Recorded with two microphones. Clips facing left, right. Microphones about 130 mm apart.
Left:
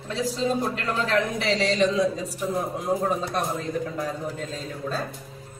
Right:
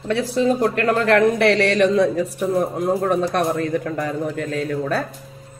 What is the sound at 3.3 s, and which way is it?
A man's voice, 70° right (ahead or behind).